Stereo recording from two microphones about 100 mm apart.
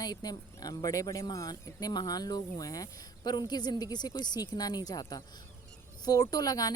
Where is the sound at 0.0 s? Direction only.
40° left (ahead or behind).